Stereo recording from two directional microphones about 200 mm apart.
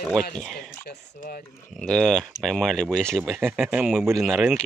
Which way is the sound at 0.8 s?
50° left (ahead or behind).